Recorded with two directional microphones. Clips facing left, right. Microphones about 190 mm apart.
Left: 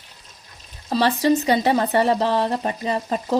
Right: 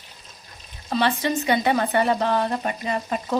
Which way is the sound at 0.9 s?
35° left (ahead or behind).